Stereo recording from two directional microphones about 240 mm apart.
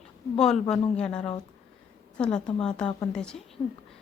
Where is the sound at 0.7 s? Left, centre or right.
Centre.